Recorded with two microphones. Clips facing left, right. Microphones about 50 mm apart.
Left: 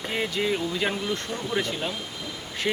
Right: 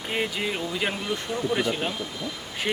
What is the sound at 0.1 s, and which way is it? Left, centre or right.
Speech, centre.